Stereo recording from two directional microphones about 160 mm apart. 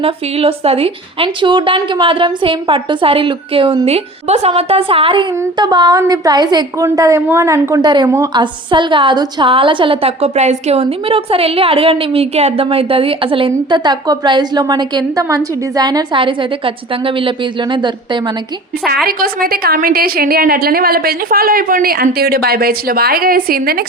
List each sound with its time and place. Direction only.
0.0 s a woman's voice: 35° right (ahead or behind)
19.0 s a woman's voice: 70° right (ahead or behind)